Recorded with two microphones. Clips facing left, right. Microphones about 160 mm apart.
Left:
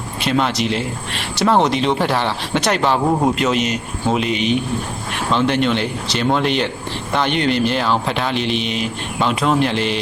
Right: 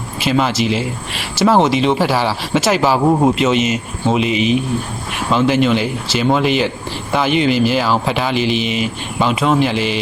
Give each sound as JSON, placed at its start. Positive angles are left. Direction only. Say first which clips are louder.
{"t": 0.2, "sound": "speech", "louder": "right 2 dB", "side_deg": 0}